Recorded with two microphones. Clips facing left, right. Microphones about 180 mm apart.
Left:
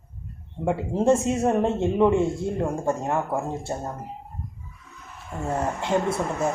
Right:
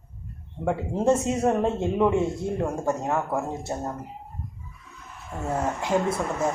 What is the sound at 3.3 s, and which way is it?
Speech, 5° left (ahead or behind).